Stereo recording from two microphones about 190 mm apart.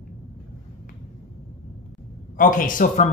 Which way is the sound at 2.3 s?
45° left (ahead or behind).